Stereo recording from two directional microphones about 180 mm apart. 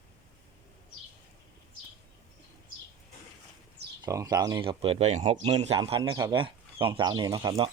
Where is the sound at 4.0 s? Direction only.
20° right (ahead or behind); by 5.8 s 35° right (ahead or behind).